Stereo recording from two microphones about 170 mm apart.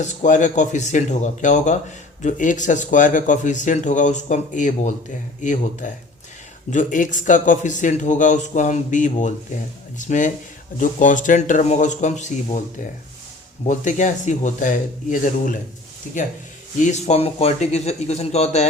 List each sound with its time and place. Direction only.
0.0 s speech: 45° left (ahead or behind)